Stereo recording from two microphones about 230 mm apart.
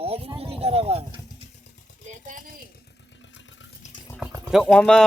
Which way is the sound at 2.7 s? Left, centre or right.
Left.